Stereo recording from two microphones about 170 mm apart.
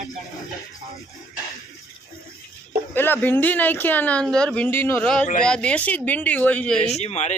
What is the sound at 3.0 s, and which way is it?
Speech, 10° left (ahead or behind).